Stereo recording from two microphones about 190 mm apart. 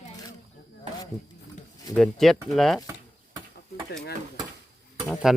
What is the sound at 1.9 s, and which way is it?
Speech, 5° left (ahead or behind).